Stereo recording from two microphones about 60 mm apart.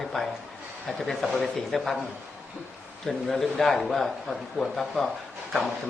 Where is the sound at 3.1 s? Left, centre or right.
Centre.